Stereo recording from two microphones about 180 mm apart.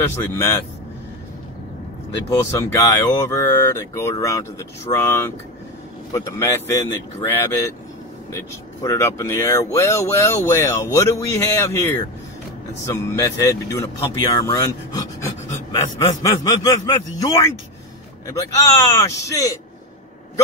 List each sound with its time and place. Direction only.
0.0 s speech: 10° left (ahead or behind)
2.2 s speech: 15° left (ahead or behind)
18.9 s speech: 15° left (ahead or behind)